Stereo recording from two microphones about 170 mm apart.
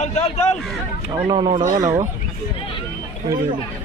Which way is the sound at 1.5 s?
50° right (ahead or behind).